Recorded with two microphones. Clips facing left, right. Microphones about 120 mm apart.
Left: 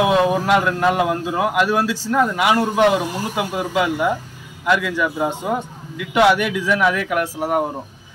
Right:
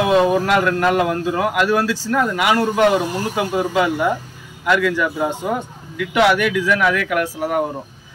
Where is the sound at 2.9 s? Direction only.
10° left (ahead or behind).